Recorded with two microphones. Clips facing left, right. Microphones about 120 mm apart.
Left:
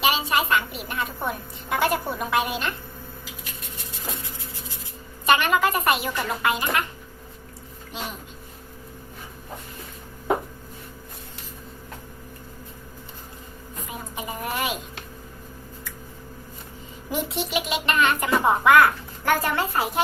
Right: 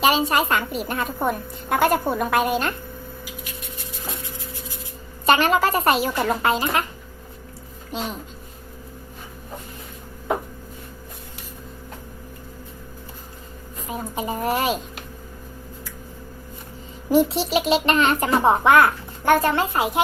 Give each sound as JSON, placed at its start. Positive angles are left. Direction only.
{"t": 0.0, "sound": "a woman's voice", "side_deg": -40}
{"t": 5.2, "sound": "a woman's voice", "side_deg": -35}
{"t": 13.9, "sound": "speech", "side_deg": -35}
{"t": 17.1, "sound": "a child's voice", "side_deg": -35}